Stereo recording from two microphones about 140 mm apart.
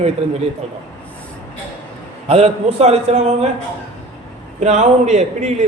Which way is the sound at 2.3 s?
45° right (ahead or behind).